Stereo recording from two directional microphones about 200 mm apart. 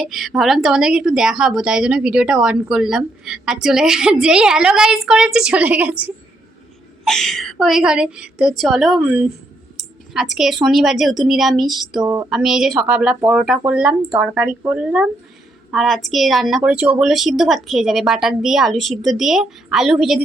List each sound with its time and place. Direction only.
0.0 s a woman's voice: centre (ahead or behind)
12.0 s speech: 15° right (ahead or behind)
12.3 s a woman's voice: centre (ahead or behind)